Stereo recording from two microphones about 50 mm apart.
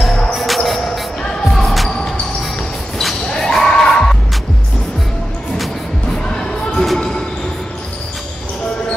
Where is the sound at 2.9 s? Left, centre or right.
Centre.